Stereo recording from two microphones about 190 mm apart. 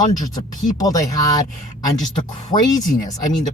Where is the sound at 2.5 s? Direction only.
20° left (ahead or behind).